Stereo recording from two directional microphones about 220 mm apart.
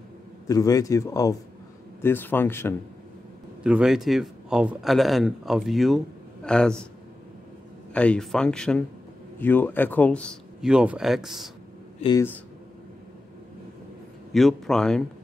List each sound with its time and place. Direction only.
0.5 s a man's voice: 15° left (ahead or behind)
3.6 s speech: 5° right (ahead or behind)
7.9 s speech: 5° left (ahead or behind)
12.0 s speech: 20° left (ahead or behind)
14.3 s speech: centre (ahead or behind)